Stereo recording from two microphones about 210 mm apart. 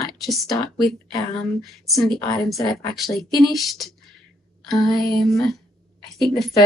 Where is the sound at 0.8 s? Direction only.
Centre (ahead or behind).